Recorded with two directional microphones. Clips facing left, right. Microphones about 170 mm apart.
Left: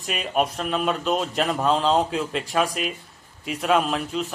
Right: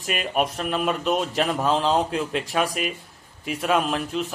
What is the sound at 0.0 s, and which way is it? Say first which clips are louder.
A man's voice: even; centre (ahead or behind).